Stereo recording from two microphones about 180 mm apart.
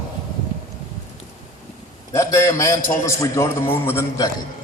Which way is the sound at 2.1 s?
15° left (ahead or behind).